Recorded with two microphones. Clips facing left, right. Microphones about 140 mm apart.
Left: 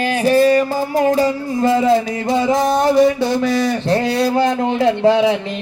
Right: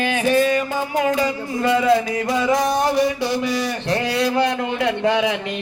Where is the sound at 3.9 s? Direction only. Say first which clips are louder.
Left 2 dB; 35° left (ahead or behind).